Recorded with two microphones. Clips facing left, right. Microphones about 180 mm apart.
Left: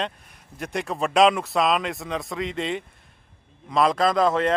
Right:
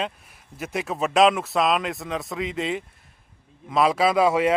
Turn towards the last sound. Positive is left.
turn(degrees=-10)  # may be behind; listen again after turning